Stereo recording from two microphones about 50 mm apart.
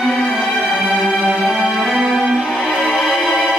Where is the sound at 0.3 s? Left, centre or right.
Centre.